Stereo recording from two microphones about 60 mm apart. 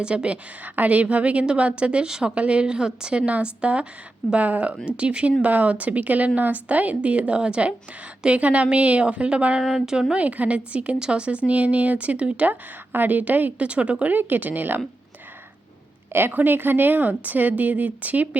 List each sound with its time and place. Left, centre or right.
0.0 s a woman's voice: centre
9.6 s speech: centre
10.2 s a woman's voice: right
12.9 s a woman's voice: right
16.1 s a woman's voice: right